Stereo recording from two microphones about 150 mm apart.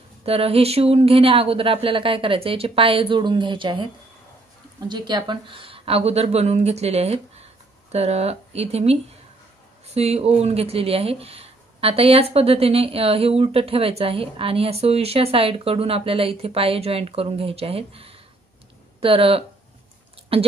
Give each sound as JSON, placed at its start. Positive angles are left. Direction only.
{"t": 0.2, "sound": "speech", "side_deg": -40}